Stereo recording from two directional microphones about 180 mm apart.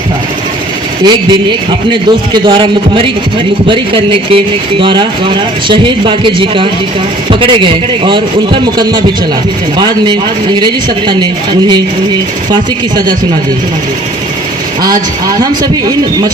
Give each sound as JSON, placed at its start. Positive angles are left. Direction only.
{"t": 1.0, "sound": "speech", "side_deg": -25}
{"t": 14.8, "sound": "speech", "side_deg": -20}